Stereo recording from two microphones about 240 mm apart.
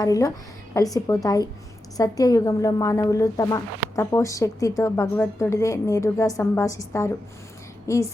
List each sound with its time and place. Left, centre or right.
0.0 s a woman's voice: centre